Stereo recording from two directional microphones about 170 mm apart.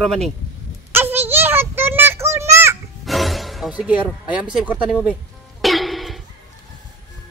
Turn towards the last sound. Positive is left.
turn(degrees=0)  # may be behind; listen again after turning